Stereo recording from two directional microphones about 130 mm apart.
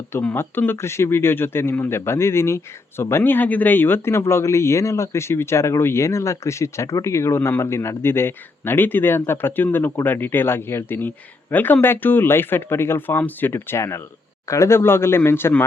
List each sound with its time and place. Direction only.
0.1 s speech: 15° left (ahead or behind)